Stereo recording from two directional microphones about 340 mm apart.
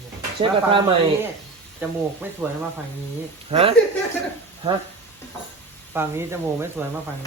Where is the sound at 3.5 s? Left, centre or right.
Centre.